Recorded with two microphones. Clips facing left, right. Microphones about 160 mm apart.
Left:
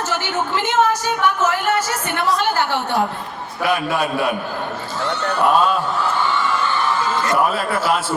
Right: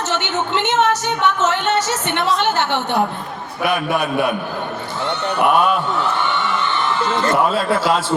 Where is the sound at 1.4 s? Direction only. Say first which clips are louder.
Right 1 dB; 25° right (ahead or behind).